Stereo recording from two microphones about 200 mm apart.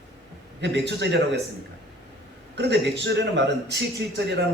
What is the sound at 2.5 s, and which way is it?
Speech, 60° right (ahead or behind).